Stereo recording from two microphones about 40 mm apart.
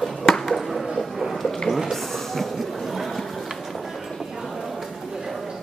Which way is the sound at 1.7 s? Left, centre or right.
Centre.